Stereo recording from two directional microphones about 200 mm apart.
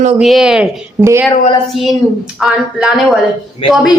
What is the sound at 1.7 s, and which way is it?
A woman's voice, centre (ahead or behind).